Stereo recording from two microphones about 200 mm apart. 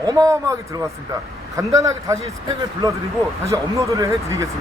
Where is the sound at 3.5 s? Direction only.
15° right (ahead or behind).